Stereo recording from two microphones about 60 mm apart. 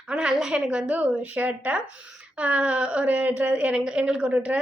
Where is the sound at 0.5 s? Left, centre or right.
Centre.